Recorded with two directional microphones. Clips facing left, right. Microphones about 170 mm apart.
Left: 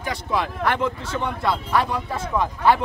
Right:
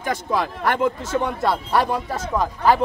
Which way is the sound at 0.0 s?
45° right (ahead or behind).